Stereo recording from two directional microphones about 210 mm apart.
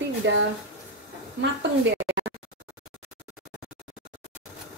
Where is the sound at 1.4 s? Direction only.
60° right (ahead or behind).